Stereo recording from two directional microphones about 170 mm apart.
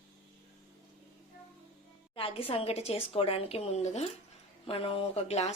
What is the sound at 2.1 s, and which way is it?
A woman's voice, 35° left (ahead or behind).